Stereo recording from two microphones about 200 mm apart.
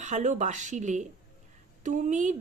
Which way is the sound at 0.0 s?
35° right (ahead or behind).